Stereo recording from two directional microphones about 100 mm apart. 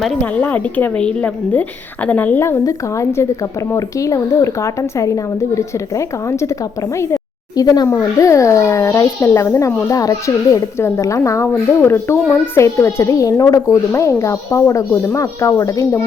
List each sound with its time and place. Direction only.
0.2 s a woman's voice: 15° left (ahead or behind)
2.4 s a child's voice: 30° left (ahead or behind)